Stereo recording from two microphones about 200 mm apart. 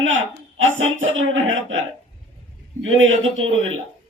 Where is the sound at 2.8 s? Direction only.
75° right (ahead or behind).